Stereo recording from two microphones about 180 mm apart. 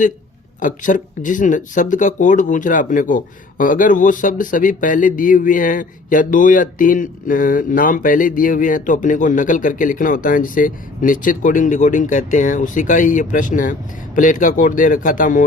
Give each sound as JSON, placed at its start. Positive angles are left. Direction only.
{"t": 0.6, "sound": "speech", "side_deg": 45}